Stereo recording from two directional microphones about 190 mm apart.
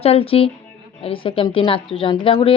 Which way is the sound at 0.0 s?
30° left (ahead or behind).